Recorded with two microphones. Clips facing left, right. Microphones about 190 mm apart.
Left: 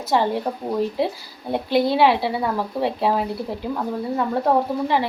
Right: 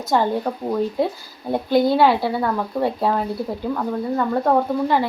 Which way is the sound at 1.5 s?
Centre (ahead or behind).